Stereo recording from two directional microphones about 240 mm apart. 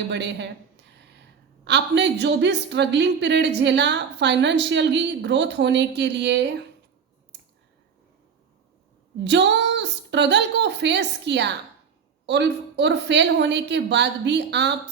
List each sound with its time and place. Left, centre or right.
0.1 s a woman's voice: right
1.6 s a woman's voice: right
7.3 s a sound: right
9.2 s a woman's voice: right